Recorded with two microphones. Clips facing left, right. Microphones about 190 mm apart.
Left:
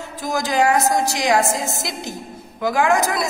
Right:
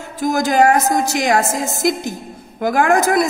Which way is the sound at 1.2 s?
45° right (ahead or behind).